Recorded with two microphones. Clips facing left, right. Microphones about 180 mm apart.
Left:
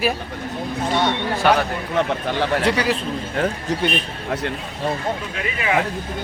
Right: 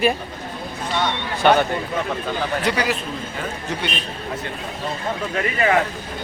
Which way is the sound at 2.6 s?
30° left (ahead or behind).